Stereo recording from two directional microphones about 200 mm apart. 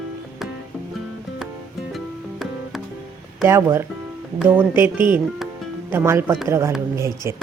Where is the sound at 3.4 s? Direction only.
15° right (ahead or behind).